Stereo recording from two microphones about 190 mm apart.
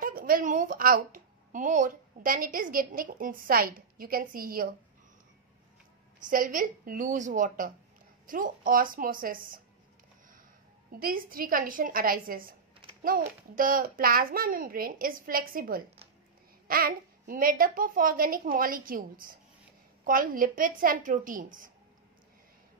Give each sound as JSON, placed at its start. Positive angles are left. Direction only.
{"t": 0.0, "sound": "a woman's voice", "side_deg": -50}
{"t": 6.2, "sound": "a child's voice", "side_deg": -45}
{"t": 10.9, "sound": "a child's voice", "side_deg": -50}